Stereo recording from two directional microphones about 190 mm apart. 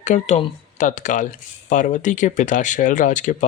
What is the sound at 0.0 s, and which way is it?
A man's voice, 35° left (ahead or behind).